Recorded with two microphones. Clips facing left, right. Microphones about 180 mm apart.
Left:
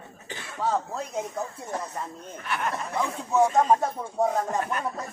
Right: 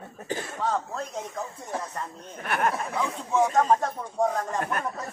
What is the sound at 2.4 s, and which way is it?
Snicker, 55° right (ahead or behind).